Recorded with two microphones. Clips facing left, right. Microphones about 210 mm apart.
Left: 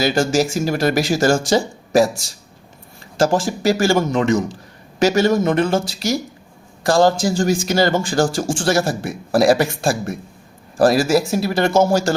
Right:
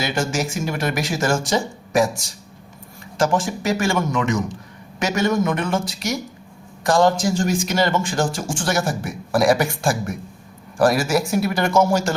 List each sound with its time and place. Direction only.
0.0 s a man's voice: 35° left (ahead or behind)
3.2 s a man's voice: 30° left (ahead or behind)